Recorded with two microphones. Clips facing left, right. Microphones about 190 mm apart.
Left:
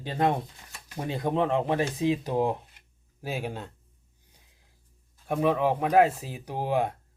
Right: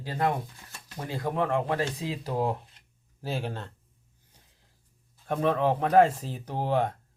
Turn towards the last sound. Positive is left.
turn(degrees=10)  # may be behind; listen again after turning